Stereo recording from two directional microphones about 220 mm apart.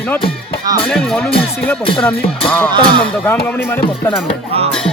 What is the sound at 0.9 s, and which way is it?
Speech, centre (ahead or behind).